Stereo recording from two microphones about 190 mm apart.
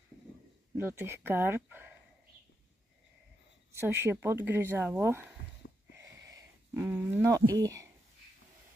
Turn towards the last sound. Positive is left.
turn(degrees=-15)  # may be behind; listen again after turning